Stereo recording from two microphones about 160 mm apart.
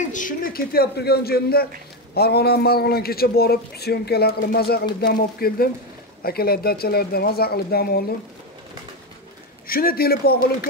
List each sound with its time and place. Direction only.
0.1 s a man's voice: 60° left (ahead or behind); by 8.0 s 75° left (ahead or behind)
9.7 s speech: 70° left (ahead or behind)